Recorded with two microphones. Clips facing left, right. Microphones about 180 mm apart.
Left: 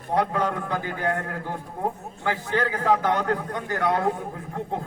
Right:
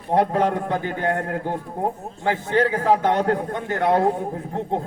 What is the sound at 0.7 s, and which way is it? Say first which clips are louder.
A man's voice: right 3 dB; 25° right (ahead or behind).